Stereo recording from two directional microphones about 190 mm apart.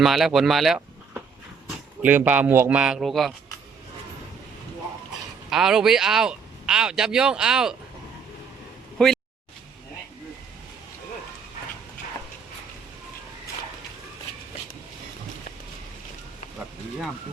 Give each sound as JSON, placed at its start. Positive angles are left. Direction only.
{"t": 0.0, "sound": "a man's voice", "side_deg": 0}
{"t": 5.5, "sound": "speech", "side_deg": 0}
{"t": 9.0, "sound": "speech", "side_deg": 5}